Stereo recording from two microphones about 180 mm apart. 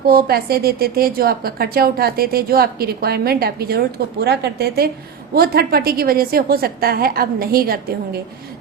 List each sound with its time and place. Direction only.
0.0 s a woman's voice: 60° right (ahead or behind)